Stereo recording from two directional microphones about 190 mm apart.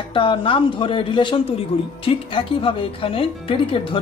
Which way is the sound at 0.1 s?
25° left (ahead or behind).